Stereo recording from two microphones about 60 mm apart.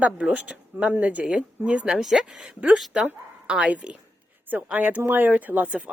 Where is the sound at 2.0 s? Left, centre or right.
Centre.